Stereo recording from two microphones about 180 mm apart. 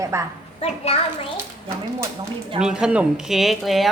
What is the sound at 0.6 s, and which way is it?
Speech, 35° left (ahead or behind).